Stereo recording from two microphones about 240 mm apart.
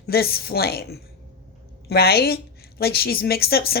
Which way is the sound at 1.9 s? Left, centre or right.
Left.